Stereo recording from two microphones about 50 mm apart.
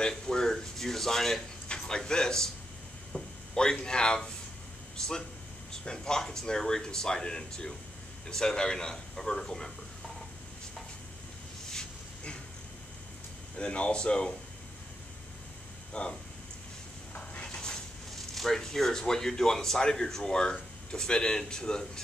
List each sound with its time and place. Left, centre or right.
0.1 s speech: centre
3.5 s speech: centre
13.6 s speech: left
15.9 s speech: centre
17.1 s a sound: left
18.1 s speech: centre